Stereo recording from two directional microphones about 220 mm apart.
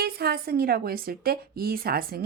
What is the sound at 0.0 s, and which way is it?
A woman's voice, 45° right (ahead or behind).